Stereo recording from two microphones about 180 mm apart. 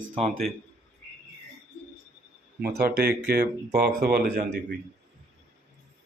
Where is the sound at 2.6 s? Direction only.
60° right (ahead or behind).